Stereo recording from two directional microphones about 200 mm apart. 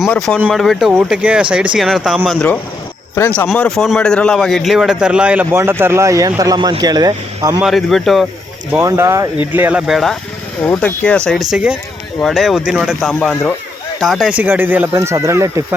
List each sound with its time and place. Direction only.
0.0 s a man's voice: centre (ahead or behind)
3.5 s a man's voice: centre (ahead or behind); by 7.6 s 20° right (ahead or behind)
7.6 s a man's voice: centre (ahead or behind)
8.7 s a man's voice: 15° right (ahead or behind); by 11.2 s 5° left (ahead or behind)
11.5 s a man's voice: 5° right (ahead or behind)